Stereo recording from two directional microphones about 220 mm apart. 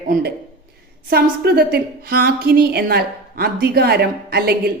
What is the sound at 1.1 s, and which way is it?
A woman's voice, 45° right (ahead or behind).